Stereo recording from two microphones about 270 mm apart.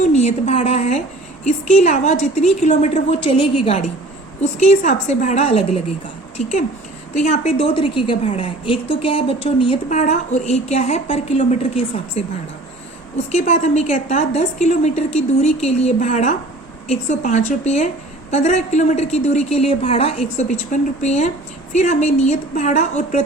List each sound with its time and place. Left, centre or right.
0.0 s a woman's voice: left
13.3 s a woman's voice: left